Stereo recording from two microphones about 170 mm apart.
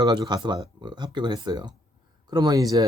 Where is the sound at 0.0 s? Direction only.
25° right (ahead or behind).